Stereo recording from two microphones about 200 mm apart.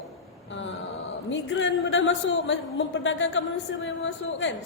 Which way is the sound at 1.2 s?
70° left (ahead or behind).